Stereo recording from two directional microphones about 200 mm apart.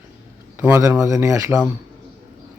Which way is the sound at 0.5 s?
10° right (ahead or behind).